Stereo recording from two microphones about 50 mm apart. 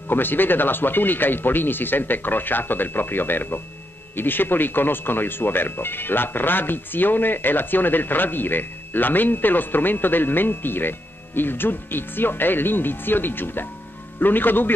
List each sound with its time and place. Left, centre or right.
0.1 s a man's voice: left